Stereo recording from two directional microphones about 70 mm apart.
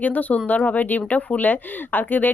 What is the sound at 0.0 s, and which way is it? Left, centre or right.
Speech, left.